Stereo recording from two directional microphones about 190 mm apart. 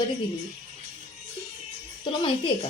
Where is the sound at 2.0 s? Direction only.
25° left (ahead or behind).